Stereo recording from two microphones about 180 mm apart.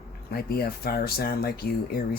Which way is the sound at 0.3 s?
60° left (ahead or behind).